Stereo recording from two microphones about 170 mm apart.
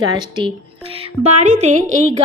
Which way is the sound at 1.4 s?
45° right (ahead or behind).